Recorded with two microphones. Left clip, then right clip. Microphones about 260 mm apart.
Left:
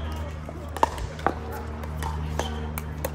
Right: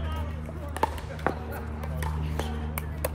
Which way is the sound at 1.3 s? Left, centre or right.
Centre.